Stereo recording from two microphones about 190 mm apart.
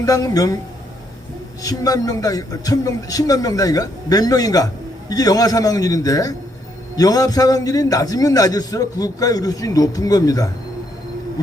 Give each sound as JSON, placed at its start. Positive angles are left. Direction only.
{"t": 0.0, "sound": "a man's voice", "side_deg": 15}
{"t": 1.6, "sound": "a man's voice", "side_deg": 20}